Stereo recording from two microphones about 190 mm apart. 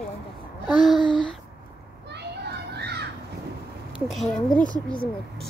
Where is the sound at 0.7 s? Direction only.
Centre (ahead or behind).